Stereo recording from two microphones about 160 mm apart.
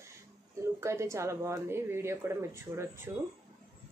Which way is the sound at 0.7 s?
15° right (ahead or behind).